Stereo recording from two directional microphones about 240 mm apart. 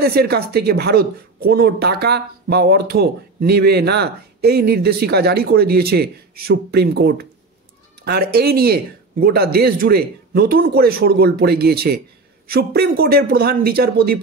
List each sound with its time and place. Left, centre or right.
0.0 s speech: right